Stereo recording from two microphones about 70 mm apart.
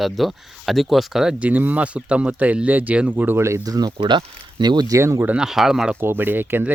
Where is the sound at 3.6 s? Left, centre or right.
Right.